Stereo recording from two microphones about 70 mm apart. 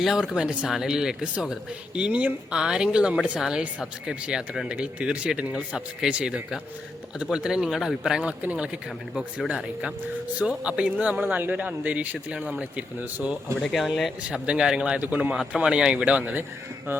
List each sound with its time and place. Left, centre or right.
0.0 s speech: centre
8.2 s speech: centre
13.6 s speech: centre
13.8 s speech: centre
14.4 s speech: centre
16.9 s speech: right